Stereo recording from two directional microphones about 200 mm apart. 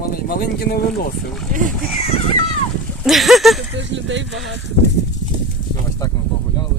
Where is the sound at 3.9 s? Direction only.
65° right (ahead or behind).